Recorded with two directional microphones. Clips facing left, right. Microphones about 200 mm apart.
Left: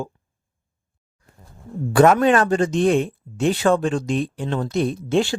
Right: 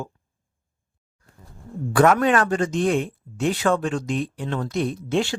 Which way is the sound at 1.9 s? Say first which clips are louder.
Left 3 dB; 25° left (ahead or behind).